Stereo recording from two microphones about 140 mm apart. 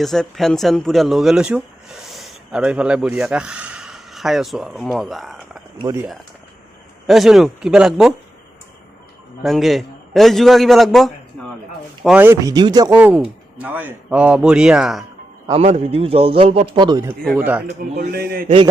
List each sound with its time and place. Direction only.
0.0 s speech: centre (ahead or behind)
2.0 s a sound: centre (ahead or behind)
2.6 s speech: 10° right (ahead or behind)
5.8 s speech: 20° right (ahead or behind)
7.1 s speech: centre (ahead or behind)
9.4 s a man's voice: centre (ahead or behind)
12.0 s speech: 10° right (ahead or behind)
13.0 s speech: 10° right (ahead or behind)
15.5 s a man's voice: 45° right (ahead or behind); by 17.1 s 30° right (ahead or behind)
17.3 s speech: 10° right (ahead or behind)
17.7 s a man's voice: 65° right (ahead or behind); by 18.5 s 90° right